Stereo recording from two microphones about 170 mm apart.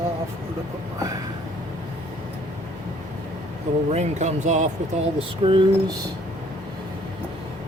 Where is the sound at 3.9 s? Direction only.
45° right (ahead or behind).